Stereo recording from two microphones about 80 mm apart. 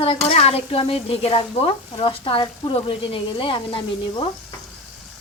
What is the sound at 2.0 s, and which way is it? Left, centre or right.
A woman's voice, left.